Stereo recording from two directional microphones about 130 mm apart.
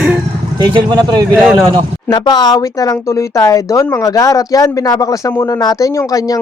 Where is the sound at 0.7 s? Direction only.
35° right (ahead or behind).